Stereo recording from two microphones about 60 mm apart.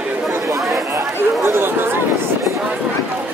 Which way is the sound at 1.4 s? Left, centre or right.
Right.